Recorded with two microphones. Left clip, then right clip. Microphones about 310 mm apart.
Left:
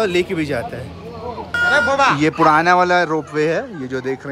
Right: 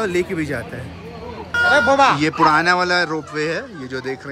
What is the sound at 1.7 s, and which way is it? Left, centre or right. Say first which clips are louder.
Speech: right 1 dB; right.